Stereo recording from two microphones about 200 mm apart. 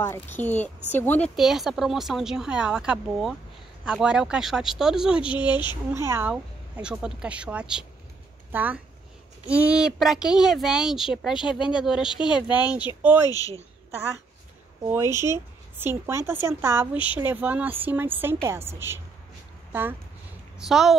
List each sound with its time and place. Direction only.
0.0 s a woman's voice: 10° left (ahead or behind)
1.3 s speech: centre (ahead or behind)
5.2 s speech: 25° left (ahead or behind)
5.9 s a woman's voice: 15° right (ahead or behind)
12.4 s a woman's voice: 20° left (ahead or behind)
15.1 s a woman's voice: 15° right (ahead or behind)